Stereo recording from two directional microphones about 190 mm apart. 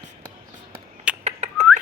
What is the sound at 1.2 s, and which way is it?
Squawk, 35° right (ahead or behind).